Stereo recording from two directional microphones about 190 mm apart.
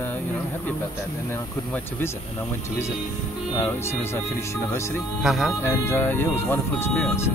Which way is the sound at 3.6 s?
10° left (ahead or behind).